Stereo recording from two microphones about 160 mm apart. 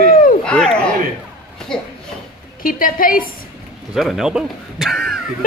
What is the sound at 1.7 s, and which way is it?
Speech, 5° left (ahead or behind).